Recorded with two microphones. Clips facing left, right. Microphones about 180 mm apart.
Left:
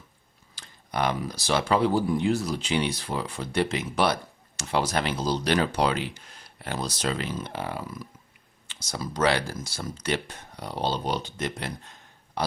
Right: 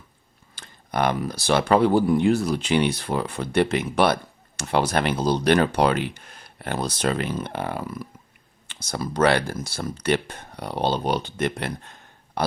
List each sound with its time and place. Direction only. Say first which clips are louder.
0.5 s speech: right 4 dB; 55° right (ahead or behind)